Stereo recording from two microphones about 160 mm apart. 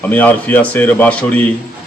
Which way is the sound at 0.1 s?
10° left (ahead or behind).